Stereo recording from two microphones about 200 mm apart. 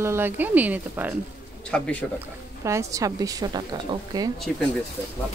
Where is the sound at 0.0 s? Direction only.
10° right (ahead or behind).